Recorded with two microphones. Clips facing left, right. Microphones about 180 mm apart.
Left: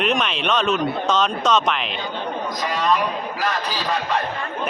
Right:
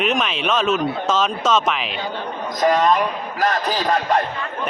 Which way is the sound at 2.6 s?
45° right (ahead or behind).